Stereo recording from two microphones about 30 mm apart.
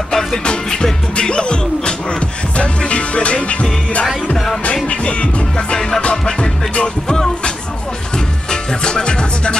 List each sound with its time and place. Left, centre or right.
0.1 s music: centre
1.1 s music: left
4.8 s music: left
7.1 s music: left